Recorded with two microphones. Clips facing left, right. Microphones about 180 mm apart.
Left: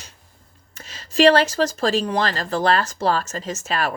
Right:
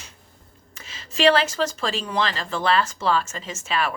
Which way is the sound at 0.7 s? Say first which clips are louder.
Left 9 dB; 40° left (ahead or behind).